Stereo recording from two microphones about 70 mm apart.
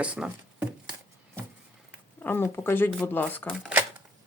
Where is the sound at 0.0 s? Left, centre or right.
Centre.